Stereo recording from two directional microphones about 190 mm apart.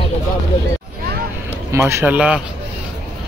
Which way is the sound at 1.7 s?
15° right (ahead or behind).